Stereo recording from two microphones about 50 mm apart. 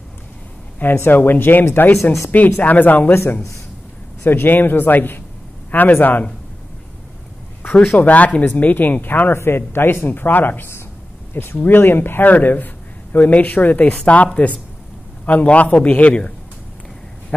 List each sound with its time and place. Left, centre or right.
0.9 s speech: left
2.3 s a man's voice: left
4.2 s a man's voice: left
8.0 s a man's voice: left
8.3 s speech: centre
8.5 s a man's voice: left
9.3 s a man's voice: left